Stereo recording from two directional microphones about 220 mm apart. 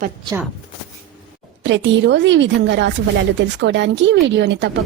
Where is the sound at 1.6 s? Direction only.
55° right (ahead or behind).